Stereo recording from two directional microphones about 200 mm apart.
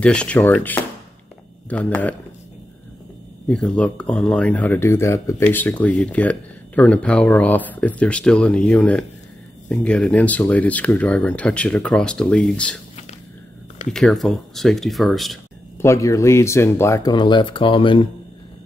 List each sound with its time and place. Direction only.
0.0 s speech: 5° left (ahead or behind)
3.4 s speech: 5° left (ahead or behind)
13.9 s speech: 5° left (ahead or behind)
15.8 s speech: 15° left (ahead or behind)